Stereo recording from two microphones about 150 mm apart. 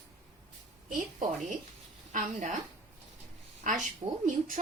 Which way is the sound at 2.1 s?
55° right (ahead or behind).